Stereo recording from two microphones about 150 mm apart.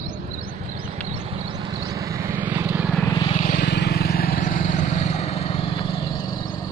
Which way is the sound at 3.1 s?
30° left (ahead or behind).